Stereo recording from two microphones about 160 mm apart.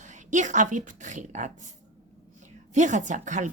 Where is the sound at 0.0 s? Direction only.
50° right (ahead or behind).